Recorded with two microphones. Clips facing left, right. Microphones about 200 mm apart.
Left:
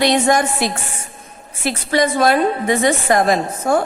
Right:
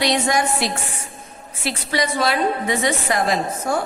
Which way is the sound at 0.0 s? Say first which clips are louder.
Left 5 dB; 50° left (ahead or behind).